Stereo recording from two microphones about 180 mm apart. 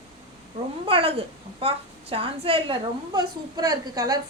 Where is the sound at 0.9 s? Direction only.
30° right (ahead or behind).